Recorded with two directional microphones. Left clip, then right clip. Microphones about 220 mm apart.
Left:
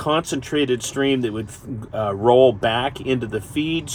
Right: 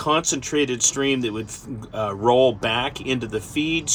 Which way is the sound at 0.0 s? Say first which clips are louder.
Even; 15° left (ahead or behind).